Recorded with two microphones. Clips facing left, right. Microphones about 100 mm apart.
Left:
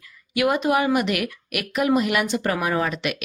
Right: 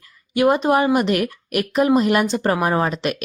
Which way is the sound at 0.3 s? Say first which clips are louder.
Right 4 dB; 35° right (ahead or behind).